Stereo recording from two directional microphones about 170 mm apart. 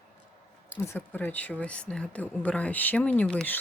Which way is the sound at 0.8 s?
15° left (ahead or behind).